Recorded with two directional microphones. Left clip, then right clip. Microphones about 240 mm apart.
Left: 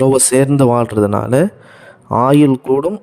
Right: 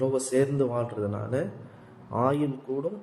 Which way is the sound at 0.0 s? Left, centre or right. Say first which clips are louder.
Left 13 dB; left.